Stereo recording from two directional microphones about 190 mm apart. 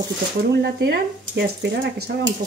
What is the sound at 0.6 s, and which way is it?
Speech, 60° right (ahead or behind).